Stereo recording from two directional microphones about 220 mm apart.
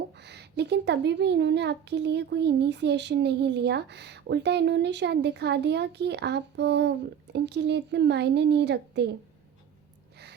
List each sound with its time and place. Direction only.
0.2 s a child's voice: 50° right (ahead or behind)